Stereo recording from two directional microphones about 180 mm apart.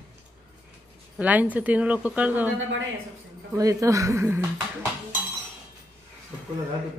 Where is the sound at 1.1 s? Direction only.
10° right (ahead or behind).